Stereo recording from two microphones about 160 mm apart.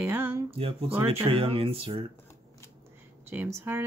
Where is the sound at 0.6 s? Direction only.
35° right (ahead or behind).